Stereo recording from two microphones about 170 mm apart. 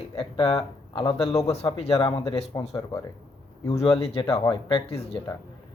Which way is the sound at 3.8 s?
35° left (ahead or behind).